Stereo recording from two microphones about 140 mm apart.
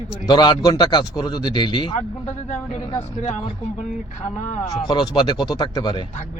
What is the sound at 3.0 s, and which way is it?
Speech, 50° left (ahead or behind).